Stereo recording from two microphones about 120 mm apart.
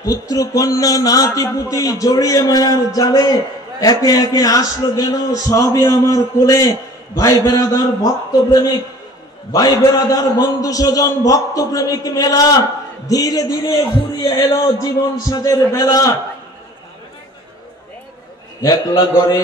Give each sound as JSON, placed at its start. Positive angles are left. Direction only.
{"t": 0.0, "sound": "a man's voice", "side_deg": 30}
{"t": 18.6, "sound": "a man's voice", "side_deg": 30}